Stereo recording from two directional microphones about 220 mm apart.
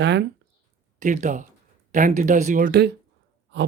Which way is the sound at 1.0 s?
35° right (ahead or behind).